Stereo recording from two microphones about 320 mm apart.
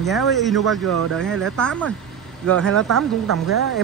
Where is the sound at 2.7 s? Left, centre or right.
Right.